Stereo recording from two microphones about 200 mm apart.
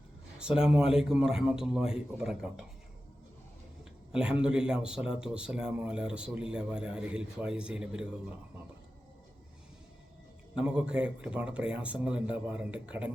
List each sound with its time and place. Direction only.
0.3 s speech: 5° right (ahead or behind)
4.1 s speech: 5° right (ahead or behind)
10.5 s speech: 5° right (ahead or behind)